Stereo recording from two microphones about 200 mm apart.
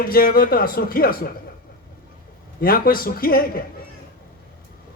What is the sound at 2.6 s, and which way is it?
A man's voice, 45° left (ahead or behind).